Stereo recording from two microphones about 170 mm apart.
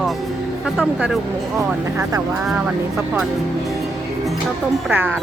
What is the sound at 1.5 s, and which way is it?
Speech, 15° right (ahead or behind).